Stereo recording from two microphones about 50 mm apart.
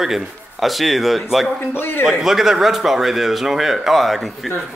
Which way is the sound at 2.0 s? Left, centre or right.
Centre.